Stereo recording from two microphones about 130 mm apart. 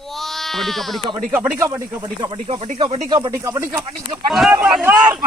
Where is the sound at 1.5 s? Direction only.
20° right (ahead or behind).